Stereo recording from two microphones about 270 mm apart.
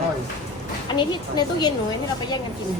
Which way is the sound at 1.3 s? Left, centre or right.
Centre.